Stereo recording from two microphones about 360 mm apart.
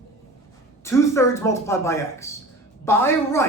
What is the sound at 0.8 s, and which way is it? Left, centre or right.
A man's voice, centre.